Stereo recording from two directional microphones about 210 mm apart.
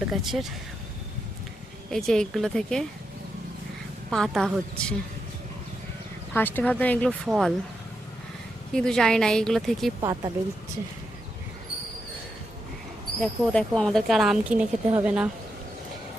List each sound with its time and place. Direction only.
0.1 s speech: centre (ahead or behind)
1.9 s speech: centre (ahead or behind)
4.1 s speech: centre (ahead or behind)
6.3 s speech: 10° left (ahead or behind)
8.7 s speech: 5° left (ahead or behind)
10.0 s speech: 15° right (ahead or behind)
13.1 s speech: 5° left (ahead or behind)